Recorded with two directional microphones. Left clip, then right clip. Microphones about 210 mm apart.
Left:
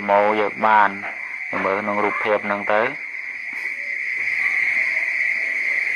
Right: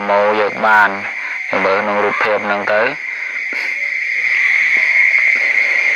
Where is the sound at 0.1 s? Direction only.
40° right (ahead or behind).